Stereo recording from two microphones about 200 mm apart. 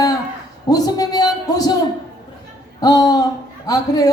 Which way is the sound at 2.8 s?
20° left (ahead or behind).